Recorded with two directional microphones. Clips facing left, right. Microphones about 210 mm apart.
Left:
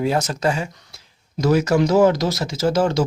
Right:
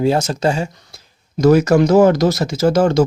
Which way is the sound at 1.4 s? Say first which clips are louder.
Right 6 dB; 50° right (ahead or behind).